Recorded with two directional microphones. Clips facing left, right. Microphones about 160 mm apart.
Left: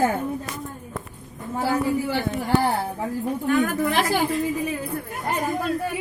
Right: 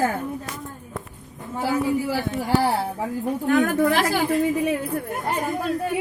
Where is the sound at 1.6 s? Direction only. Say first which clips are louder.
Even; centre (ahead or behind).